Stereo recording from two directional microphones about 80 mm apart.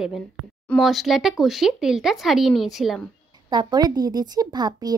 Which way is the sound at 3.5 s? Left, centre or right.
Right.